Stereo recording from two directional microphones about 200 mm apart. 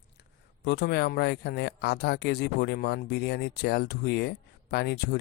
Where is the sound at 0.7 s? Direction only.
55° left (ahead or behind).